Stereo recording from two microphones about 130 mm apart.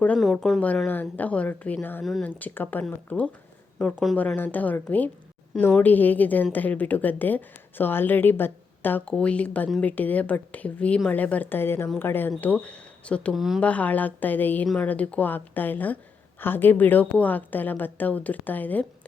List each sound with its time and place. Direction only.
0.2 s a woman's voice: centre (ahead or behind)
0.9 s a woman's voice: 15° left (ahead or behind)
13.3 s a woman's voice: centre (ahead or behind)
13.6 s a woman's voice: 10° left (ahead or behind)